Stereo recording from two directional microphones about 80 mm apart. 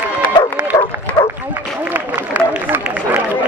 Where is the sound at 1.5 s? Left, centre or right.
Right.